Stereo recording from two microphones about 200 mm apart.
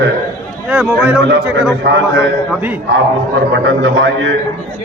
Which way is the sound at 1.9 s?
60° right (ahead or behind).